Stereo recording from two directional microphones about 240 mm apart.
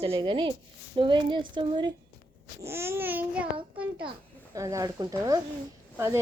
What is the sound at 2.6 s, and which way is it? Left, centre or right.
Babbling, centre.